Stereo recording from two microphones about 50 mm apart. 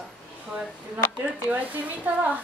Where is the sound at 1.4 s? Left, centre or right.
Right.